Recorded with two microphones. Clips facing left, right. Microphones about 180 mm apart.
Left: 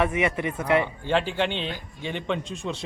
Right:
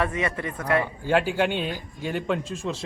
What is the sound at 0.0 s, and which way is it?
Speech, 20° left (ahead or behind).